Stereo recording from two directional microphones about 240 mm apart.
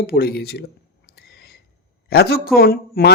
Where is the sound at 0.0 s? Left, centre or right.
Left.